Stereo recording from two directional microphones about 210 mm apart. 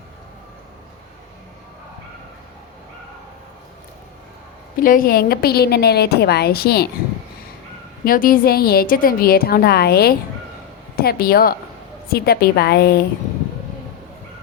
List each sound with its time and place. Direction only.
4.8 s a woman's voice: 40° left (ahead or behind)
8.0 s a woman's voice: 40° left (ahead or behind)